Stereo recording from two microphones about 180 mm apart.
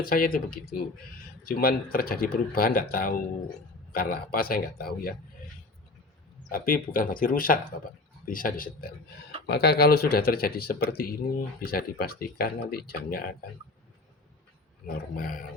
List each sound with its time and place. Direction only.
0.0 s speech: 55° left (ahead or behind)
6.5 s speech: 50° left (ahead or behind)
9.5 s speech: 65° left (ahead or behind)
14.8 s speech: 50° left (ahead or behind)